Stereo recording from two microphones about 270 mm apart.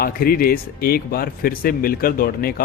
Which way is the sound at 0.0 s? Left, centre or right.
Left.